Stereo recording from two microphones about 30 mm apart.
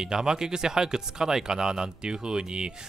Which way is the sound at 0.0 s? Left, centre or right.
Right.